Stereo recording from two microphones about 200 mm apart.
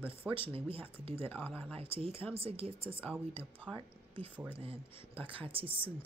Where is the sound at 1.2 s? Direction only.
10° left (ahead or behind).